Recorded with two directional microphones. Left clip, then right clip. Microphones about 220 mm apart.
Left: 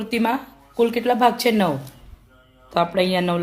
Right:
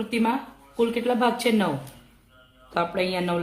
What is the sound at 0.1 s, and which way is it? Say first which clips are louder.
Speech: left 4 dB; 50° left (ahead or behind).